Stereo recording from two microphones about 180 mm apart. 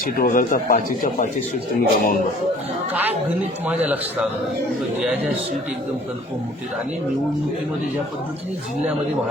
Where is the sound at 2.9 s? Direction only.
10° right (ahead or behind).